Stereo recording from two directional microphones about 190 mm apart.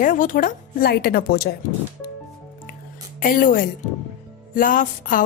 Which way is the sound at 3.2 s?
45° left (ahead or behind).